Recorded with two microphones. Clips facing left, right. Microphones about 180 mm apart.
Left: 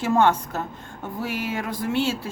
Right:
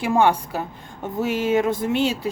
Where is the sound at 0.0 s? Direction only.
10° right (ahead or behind).